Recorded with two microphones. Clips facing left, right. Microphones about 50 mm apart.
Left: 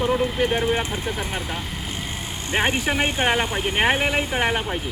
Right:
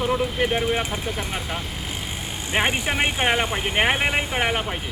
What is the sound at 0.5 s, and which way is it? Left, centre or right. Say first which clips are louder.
Speech: left 1 dB; centre.